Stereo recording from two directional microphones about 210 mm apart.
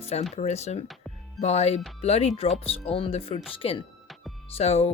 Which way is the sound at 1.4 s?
30° left (ahead or behind).